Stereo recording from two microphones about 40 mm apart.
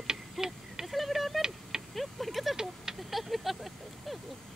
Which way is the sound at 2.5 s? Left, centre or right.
Centre.